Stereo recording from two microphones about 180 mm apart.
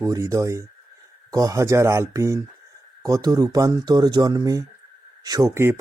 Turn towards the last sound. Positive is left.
turn(degrees=-15)  # may be behind; listen again after turning